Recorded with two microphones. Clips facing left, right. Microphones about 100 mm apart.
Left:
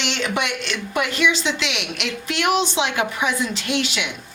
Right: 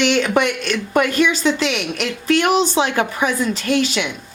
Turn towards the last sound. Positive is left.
turn(degrees=-40)  # may be behind; listen again after turning